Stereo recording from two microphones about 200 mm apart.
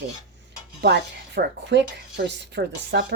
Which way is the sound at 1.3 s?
60° right (ahead or behind).